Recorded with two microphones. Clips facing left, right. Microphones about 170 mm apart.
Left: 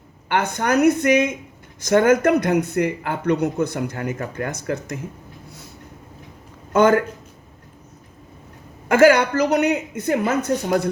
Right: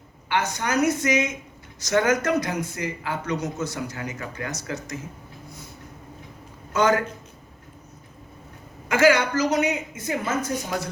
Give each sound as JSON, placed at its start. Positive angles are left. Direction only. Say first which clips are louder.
{"t": 0.3, "sound": "speech", "louder": "left 5 dB", "side_deg": 55}
{"t": 6.7, "sound": "a man's voice", "louder": "left 6 dB", "side_deg": 55}
{"t": 8.9, "sound": "speech", "louder": "left 5 dB", "side_deg": 50}